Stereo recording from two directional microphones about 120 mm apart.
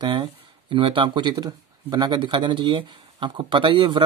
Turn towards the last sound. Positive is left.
turn(degrees=-45)  # may be behind; listen again after turning